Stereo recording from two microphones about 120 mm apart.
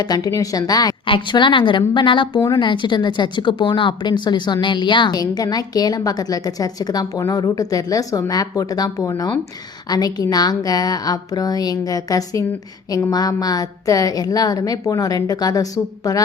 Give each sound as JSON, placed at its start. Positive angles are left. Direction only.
{"t": 0.0, "sound": "speech", "side_deg": 30}
{"t": 1.0, "sound": "a woman's voice", "side_deg": 45}